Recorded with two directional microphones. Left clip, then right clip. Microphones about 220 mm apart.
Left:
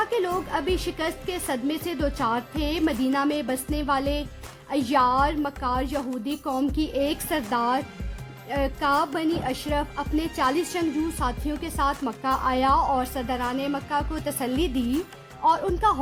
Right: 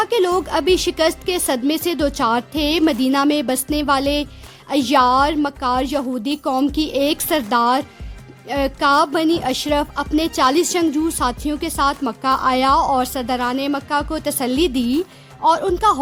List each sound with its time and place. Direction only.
0.0 s speech: 50° right (ahead or behind)